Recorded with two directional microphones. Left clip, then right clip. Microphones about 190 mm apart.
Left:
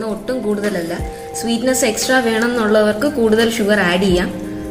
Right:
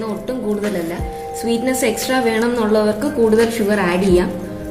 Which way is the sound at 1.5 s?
30° left (ahead or behind).